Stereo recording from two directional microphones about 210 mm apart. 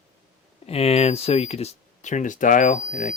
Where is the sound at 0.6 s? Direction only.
30° left (ahead or behind).